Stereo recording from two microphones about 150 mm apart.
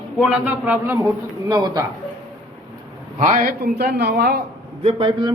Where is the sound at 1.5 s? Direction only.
25° right (ahead or behind).